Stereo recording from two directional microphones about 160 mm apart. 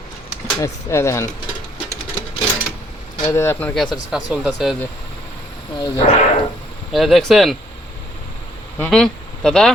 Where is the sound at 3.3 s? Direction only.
15° left (ahead or behind); by 4.7 s centre (ahead or behind).